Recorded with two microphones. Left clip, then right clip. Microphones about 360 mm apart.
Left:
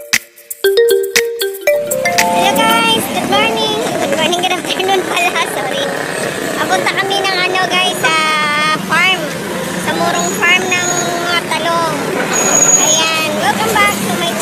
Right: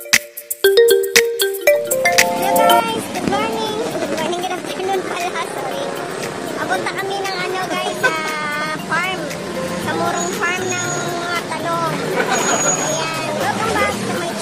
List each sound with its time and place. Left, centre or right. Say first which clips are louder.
0.7 s music: left 1 dB; centre
2.4 s vehicle: left 2 dB; right
7.5 s vehicle: left 8 dB; right